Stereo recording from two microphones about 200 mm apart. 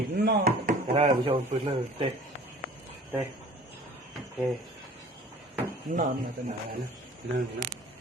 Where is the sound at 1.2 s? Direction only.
30° right (ahead or behind).